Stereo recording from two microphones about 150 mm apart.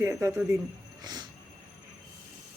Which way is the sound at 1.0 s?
30° right (ahead or behind).